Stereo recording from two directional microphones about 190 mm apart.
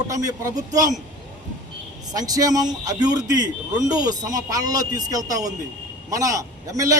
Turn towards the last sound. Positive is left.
turn(degrees=-15)  # may be behind; listen again after turning